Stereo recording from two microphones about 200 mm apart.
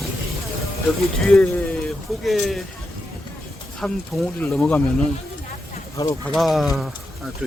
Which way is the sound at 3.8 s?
5° left (ahead or behind).